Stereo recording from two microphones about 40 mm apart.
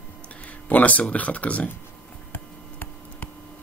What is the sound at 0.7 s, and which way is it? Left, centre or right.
Speech, left.